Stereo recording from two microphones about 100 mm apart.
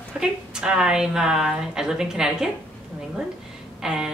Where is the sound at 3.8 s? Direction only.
5° right (ahead or behind).